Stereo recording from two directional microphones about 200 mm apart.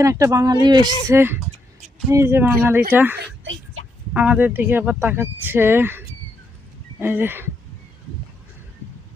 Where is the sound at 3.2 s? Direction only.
75° right (ahead or behind).